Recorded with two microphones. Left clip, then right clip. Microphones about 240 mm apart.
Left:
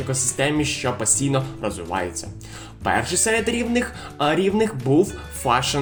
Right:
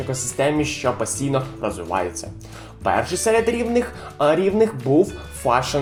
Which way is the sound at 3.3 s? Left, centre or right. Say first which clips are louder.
Right 3 dB; left.